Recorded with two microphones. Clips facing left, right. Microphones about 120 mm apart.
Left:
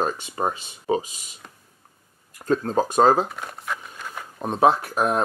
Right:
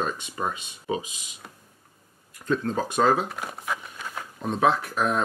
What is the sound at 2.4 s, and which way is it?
Speech, 40° left (ahead or behind).